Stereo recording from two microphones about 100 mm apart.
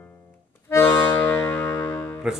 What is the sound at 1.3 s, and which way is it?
Music, 15° left (ahead or behind).